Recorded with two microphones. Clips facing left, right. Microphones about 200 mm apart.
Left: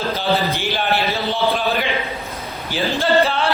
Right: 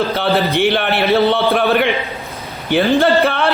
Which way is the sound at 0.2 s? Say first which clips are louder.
Right 5 dB; 65° right (ahead or behind).